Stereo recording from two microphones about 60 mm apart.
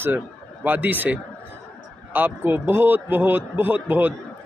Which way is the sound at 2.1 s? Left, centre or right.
Right.